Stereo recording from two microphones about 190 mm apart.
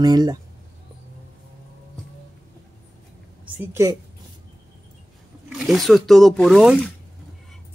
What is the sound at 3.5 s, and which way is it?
Speech, 10° right (ahead or behind).